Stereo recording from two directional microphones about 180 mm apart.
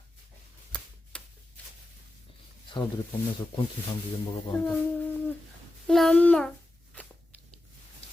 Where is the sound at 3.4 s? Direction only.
30° left (ahead or behind).